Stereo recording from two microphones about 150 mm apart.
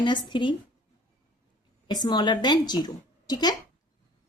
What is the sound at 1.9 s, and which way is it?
A woman's voice, 30° left (ahead or behind).